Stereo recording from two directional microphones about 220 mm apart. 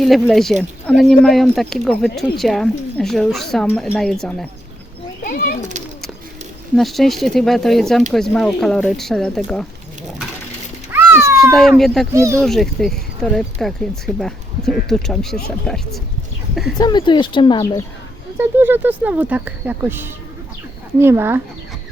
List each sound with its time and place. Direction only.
0.0 s speech: centre (ahead or behind)
5.2 s pigeon: 40° left (ahead or behind)
6.7 s speech: centre (ahead or behind)
10.9 s cat: 10° right (ahead or behind)
11.5 s speech: centre (ahead or behind)
12.1 s speech: 15° right (ahead or behind)
12.4 s speech: centre (ahead or behind)
16.7 s speech: 20° left (ahead or behind)
18.3 s speech: 10° right (ahead or behind)